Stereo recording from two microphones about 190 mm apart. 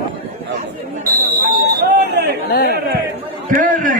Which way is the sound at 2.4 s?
55° left (ahead or behind).